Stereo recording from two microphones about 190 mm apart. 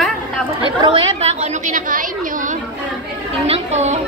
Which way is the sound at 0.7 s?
25° right (ahead or behind).